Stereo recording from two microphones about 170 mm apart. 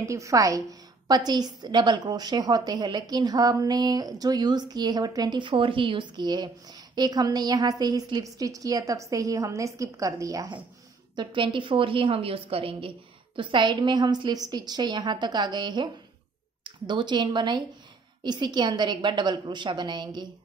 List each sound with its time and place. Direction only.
0.0 s a woman's voice: 20° right (ahead or behind)